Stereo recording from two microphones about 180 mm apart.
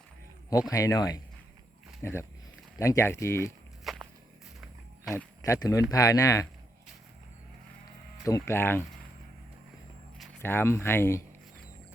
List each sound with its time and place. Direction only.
0.7 s speech: 20° left (ahead or behind)
3.9 s walk: centre (ahead or behind)
5.4 s speech: 20° left (ahead or behind)
8.2 s speech: 15° left (ahead or behind)
10.4 s speech: 10° left (ahead or behind)